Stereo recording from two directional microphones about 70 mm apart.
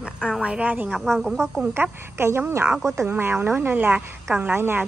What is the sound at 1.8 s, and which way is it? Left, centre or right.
A woman's voice, right.